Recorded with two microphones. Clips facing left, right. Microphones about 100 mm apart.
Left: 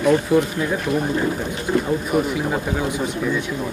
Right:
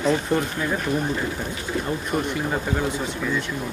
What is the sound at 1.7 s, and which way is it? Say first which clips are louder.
Speech: left 8 dB; 40° left (ahead or behind).